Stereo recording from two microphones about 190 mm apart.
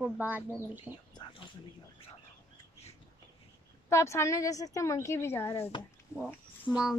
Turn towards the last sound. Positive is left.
turn(degrees=-5)  # may be behind; listen again after turning